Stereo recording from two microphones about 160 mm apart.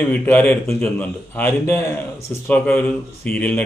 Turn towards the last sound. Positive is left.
turn(degrees=10)  # may be behind; listen again after turning